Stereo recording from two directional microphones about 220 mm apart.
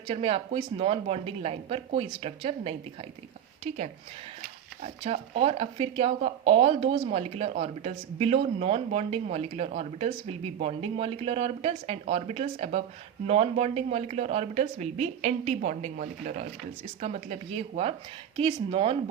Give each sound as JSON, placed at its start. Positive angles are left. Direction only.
{"t": 0.1, "sound": "speech", "side_deg": -25}
{"t": 4.8, "sound": "speech", "side_deg": -30}